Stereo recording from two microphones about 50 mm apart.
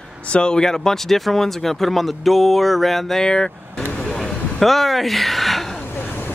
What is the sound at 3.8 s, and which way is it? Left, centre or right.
Vehicle, left.